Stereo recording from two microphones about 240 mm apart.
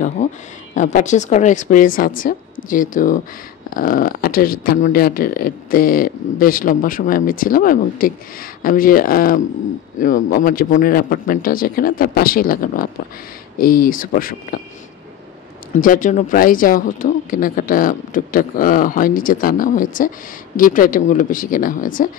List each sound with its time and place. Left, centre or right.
0.7 s speech: left
15.8 s speech: left